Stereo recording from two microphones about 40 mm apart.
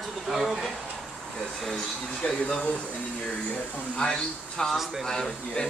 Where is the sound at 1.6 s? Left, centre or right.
Centre.